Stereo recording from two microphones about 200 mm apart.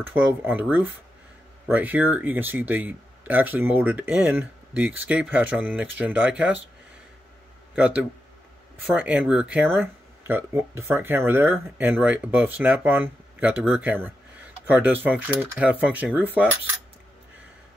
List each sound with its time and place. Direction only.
0.0 s speech: 10° right (ahead or behind)
7.7 s a man's voice: 5° right (ahead or behind)